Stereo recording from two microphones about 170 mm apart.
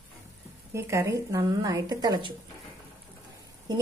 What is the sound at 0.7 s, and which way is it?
A woman's voice, 15° right (ahead or behind).